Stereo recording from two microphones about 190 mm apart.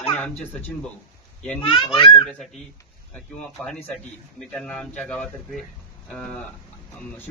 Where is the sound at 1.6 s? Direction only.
25° left (ahead or behind).